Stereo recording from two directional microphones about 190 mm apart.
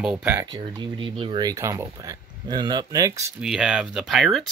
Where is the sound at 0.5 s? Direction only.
25° right (ahead or behind).